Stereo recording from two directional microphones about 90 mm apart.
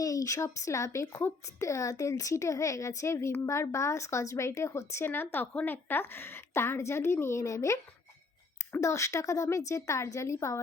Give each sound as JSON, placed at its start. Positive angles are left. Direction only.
{"t": 0.0, "sound": "a child's voice", "side_deg": 40}
{"t": 8.8, "sound": "a child's voice", "side_deg": 35}